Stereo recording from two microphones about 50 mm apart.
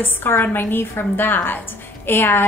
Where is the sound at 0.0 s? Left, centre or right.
Left.